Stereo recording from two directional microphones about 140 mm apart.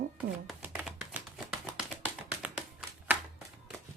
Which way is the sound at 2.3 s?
10° right (ahead or behind).